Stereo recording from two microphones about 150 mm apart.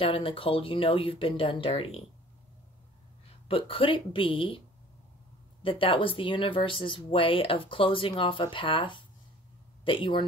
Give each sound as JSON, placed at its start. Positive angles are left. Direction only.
{"t": 0.0, "sound": "speech", "side_deg": 35}
{"t": 3.4, "sound": "speech", "side_deg": 40}
{"t": 5.6, "sound": "speech", "side_deg": 35}